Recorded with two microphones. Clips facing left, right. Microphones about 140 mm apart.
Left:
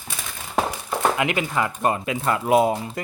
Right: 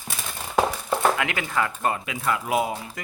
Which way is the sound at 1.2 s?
20° left (ahead or behind).